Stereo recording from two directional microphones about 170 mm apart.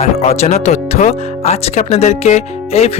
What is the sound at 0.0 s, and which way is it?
Speech, 35° left (ahead or behind).